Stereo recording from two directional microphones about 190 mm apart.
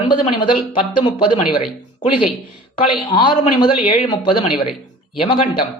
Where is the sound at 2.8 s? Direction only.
25° left (ahead or behind).